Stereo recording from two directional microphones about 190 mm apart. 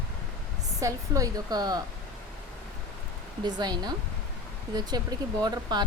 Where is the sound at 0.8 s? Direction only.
15° right (ahead or behind).